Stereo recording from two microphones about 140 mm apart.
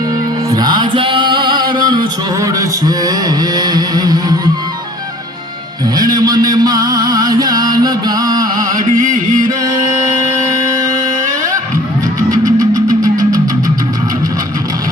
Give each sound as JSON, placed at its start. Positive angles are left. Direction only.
{"t": 0.5, "sound": "music", "side_deg": -30}
{"t": 6.0, "sound": "a sound", "side_deg": -30}
{"t": 8.7, "sound": "music", "side_deg": -75}
{"t": 10.7, "sound": "music", "side_deg": -25}